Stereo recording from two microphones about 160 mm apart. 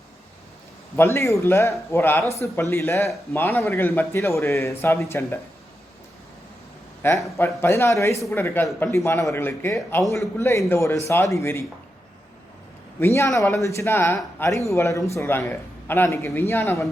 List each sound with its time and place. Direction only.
0.9 s a man's voice: 15° left (ahead or behind)
7.3 s a man's voice: 15° left (ahead or behind)
13.1 s a man's voice: 20° left (ahead or behind)